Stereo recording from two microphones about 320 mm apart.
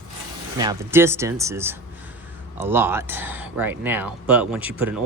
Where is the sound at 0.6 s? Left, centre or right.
Centre.